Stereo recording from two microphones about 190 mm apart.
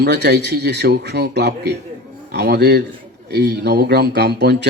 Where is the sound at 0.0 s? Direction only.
60° right (ahead or behind).